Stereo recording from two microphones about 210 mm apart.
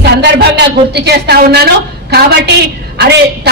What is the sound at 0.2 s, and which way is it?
A woman's voice, 50° right (ahead or behind).